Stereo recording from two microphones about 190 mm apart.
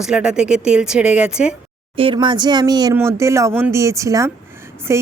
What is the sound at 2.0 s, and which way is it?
Speech, 25° right (ahead or behind).